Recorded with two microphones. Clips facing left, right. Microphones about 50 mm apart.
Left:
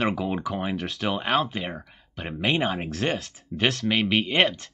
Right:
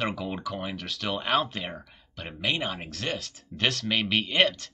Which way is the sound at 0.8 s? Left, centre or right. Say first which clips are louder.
Left 4 dB; centre.